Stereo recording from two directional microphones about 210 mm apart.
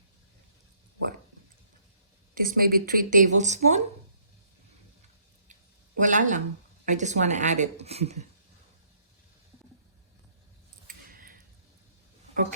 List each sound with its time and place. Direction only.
2.3 s a woman's voice: 40° right (ahead or behind)
6.0 s a woman's voice: 35° right (ahead or behind)
10.8 s a sound: 45° right (ahead or behind)